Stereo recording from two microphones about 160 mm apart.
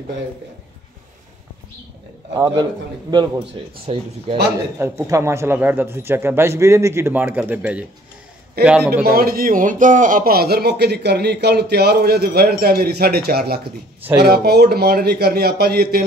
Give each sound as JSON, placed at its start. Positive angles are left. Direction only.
{"t": 2.3, "sound": "a man's voice", "side_deg": -25}
{"t": 4.7, "sound": "speech", "side_deg": -20}
{"t": 9.0, "sound": "a man's voice", "side_deg": -70}